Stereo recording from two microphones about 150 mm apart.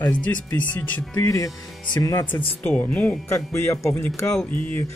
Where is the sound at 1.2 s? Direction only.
25° left (ahead or behind).